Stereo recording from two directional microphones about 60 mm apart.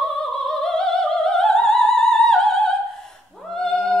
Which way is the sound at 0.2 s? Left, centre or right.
Centre.